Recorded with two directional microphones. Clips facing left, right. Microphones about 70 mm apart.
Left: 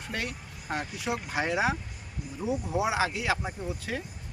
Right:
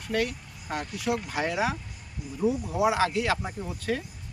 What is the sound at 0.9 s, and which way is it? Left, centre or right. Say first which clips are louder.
Speech: right 4 dB; left.